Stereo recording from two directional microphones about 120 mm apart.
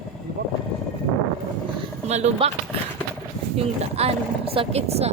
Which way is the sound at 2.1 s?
65° right (ahead or behind).